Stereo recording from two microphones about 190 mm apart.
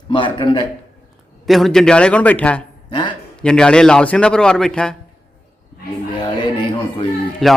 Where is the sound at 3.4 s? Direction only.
5° left (ahead or behind).